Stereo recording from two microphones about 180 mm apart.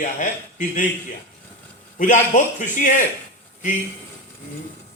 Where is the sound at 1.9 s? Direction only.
45° left (ahead or behind).